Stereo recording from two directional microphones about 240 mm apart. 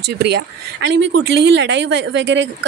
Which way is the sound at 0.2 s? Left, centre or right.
Right.